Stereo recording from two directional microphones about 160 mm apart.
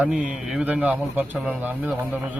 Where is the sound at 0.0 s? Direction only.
5° right (ahead or behind).